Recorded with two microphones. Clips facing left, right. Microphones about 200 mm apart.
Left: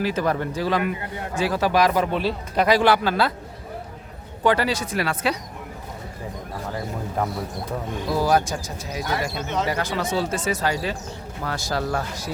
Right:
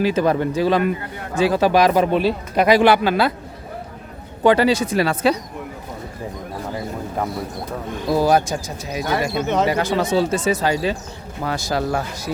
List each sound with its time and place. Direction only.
0.0 s speech: 20° right (ahead or behind)
4.4 s speech: 25° right (ahead or behind)
8.1 s speech: 25° right (ahead or behind)
9.4 s speech: 60° right (ahead or behind)
9.6 s speech: 25° right (ahead or behind)